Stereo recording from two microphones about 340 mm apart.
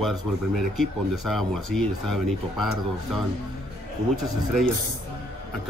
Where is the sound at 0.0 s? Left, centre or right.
Centre.